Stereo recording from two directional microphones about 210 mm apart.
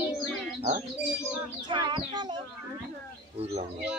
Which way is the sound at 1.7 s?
20° right (ahead or behind).